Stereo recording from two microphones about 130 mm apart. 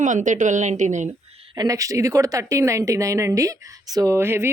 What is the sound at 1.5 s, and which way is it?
Speech, 25° right (ahead or behind).